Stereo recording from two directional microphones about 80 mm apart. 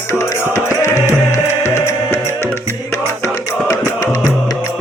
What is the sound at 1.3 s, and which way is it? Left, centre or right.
Music, left.